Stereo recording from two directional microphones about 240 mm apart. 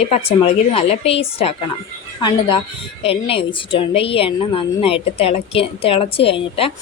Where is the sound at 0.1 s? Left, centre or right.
Left.